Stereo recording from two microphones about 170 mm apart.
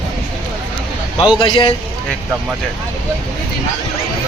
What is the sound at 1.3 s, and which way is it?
Speech, 30° left (ahead or behind).